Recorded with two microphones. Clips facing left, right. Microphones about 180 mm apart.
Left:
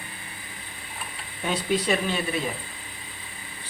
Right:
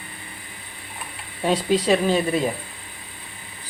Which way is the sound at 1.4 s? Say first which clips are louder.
Right 5 dB; 35° right (ahead or behind).